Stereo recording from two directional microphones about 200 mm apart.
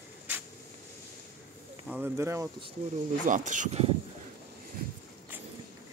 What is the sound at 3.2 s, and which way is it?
Speech, 40° right (ahead or behind).